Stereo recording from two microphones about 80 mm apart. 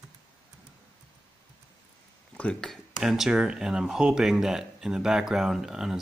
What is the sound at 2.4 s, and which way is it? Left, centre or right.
Speech, centre.